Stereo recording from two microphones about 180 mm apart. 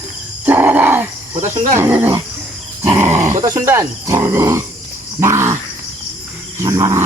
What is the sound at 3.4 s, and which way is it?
Speech, 15° right (ahead or behind).